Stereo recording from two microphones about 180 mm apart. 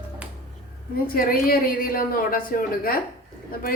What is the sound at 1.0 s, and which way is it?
A woman's voice, 55° left (ahead or behind).